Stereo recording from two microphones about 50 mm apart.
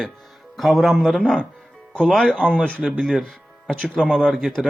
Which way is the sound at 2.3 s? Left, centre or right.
Centre.